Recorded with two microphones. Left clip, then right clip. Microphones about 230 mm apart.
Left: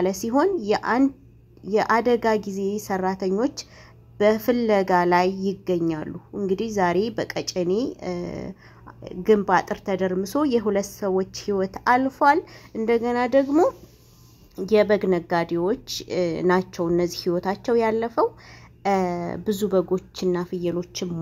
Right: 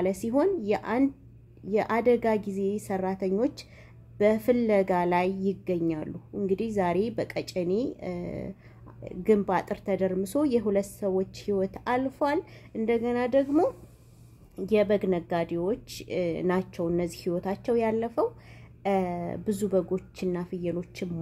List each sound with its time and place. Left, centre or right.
0.0 s speech: centre